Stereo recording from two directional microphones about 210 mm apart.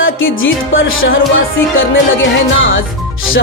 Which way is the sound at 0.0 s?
70° left (ahead or behind).